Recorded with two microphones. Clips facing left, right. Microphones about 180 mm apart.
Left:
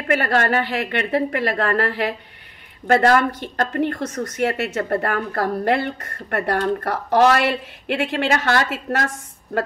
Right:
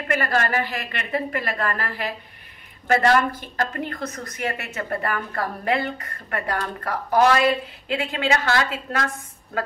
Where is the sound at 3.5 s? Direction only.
65° left (ahead or behind).